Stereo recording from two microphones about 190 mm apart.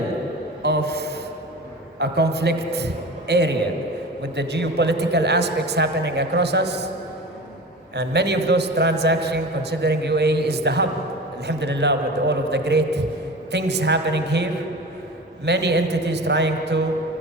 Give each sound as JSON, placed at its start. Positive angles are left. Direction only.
{"t": 0.6, "sound": "a sound", "side_deg": -60}
{"t": 2.0, "sound": "a man's voice", "side_deg": -60}
{"t": 7.9, "sound": "a man's voice", "side_deg": -60}
{"t": 15.4, "sound": "a man's voice", "side_deg": -60}